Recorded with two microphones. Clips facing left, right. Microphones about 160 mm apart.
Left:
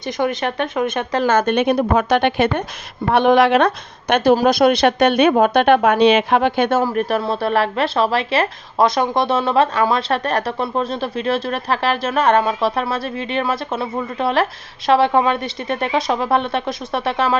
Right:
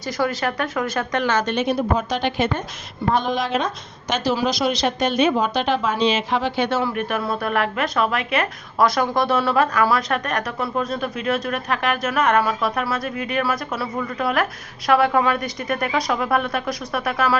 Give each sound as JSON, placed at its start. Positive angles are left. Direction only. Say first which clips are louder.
{"t": 0.0, "sound": "a woman's voice", "louder": "left 2 dB", "side_deg": 20}
{"t": 1.2, "sound": "a woman's voice", "louder": "left 7 dB", "side_deg": 50}
{"t": 4.1, "sound": "a woman's voice", "louder": "left 7 dB", "side_deg": 55}